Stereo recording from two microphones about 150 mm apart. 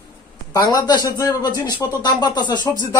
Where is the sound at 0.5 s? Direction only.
25° left (ahead or behind).